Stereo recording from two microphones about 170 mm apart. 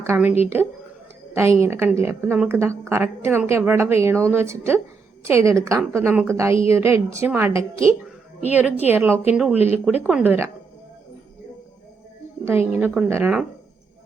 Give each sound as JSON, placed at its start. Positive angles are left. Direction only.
{"t": 0.0, "sound": "a woman's voice", "side_deg": -10}
{"t": 12.5, "sound": "a woman's voice", "side_deg": -10}